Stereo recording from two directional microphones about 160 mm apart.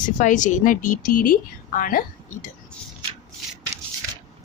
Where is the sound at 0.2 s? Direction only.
50° left (ahead or behind).